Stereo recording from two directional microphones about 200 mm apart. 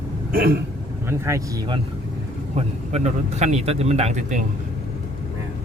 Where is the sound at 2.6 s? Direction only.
35° right (ahead or behind).